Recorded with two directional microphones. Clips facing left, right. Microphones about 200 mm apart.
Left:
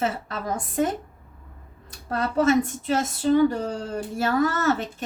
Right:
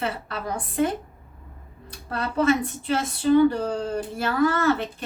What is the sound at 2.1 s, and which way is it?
Speech, 45° left (ahead or behind).